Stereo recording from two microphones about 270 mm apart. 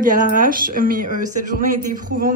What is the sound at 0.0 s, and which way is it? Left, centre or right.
A man's voice, right.